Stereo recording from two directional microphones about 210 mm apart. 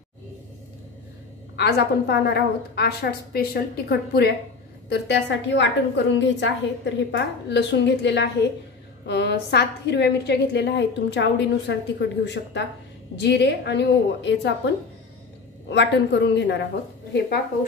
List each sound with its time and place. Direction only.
1.6 s a woman's voice: 50° left (ahead or behind)
15.7 s a woman's voice: 55° left (ahead or behind)